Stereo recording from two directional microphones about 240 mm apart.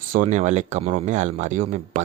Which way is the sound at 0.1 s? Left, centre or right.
Right.